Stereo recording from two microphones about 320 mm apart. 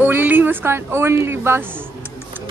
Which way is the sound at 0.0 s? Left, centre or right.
Centre.